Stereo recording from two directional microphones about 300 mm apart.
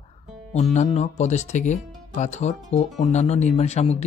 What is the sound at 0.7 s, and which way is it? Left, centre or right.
Speech, left.